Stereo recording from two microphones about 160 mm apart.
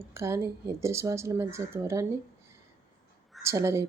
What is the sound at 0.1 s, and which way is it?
Speech, 15° right (ahead or behind).